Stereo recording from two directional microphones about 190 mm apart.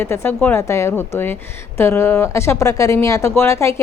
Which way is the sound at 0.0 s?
10° left (ahead or behind).